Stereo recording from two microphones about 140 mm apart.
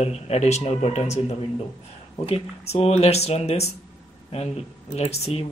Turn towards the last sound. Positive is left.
turn(degrees=45)  # may be behind; listen again after turning